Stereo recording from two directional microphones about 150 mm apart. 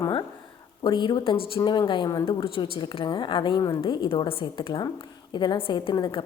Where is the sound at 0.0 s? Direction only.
25° left (ahead or behind).